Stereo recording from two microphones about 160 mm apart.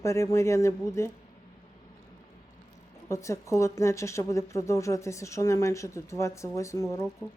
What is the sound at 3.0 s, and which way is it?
A woman's voice, 20° left (ahead or behind).